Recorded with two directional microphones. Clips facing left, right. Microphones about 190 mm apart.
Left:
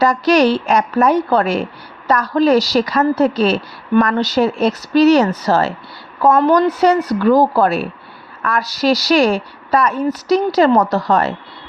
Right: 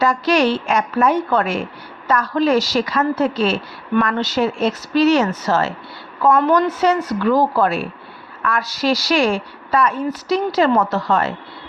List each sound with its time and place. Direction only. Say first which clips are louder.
0.0 s a woman's voice: left 4 dB; 40° left (ahead or behind)